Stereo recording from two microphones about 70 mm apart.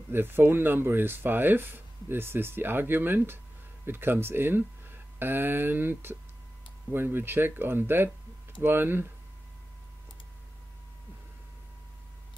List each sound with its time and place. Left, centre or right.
0.1 s speech: right